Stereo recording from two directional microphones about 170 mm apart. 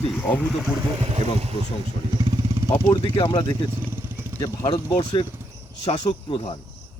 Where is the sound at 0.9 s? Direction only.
35° right (ahead or behind).